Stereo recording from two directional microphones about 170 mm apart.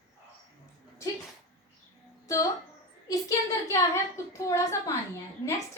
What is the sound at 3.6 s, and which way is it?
A woman's voice, 15° left (ahead or behind).